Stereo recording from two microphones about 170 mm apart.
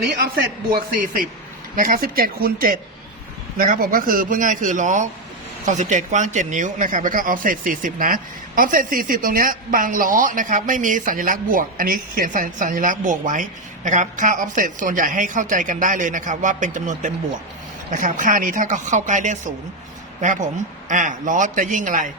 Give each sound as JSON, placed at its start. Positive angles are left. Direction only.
{"t": 0.7, "sound": "speech", "side_deg": -55}
{"t": 20.8, "sound": "speech", "side_deg": -50}